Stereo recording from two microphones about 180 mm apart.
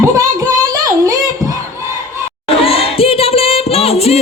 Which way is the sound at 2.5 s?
30° left (ahead or behind).